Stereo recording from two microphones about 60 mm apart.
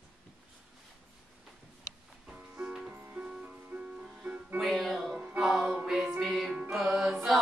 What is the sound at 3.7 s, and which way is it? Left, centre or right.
Music, right.